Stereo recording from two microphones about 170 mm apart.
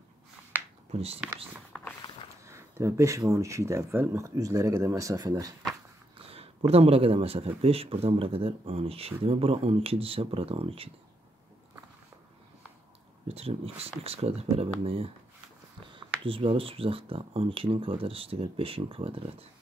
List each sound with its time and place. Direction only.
0.5 s a sound: 10° right (ahead or behind)
2.4 s speech: 15° right (ahead or behind)
6.1 s speech: 35° right (ahead or behind)
13.3 s speech: 35° right (ahead or behind)